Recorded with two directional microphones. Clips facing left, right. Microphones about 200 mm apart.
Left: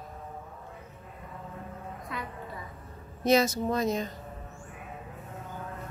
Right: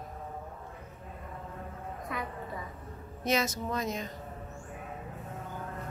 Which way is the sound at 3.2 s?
35° left (ahead or behind).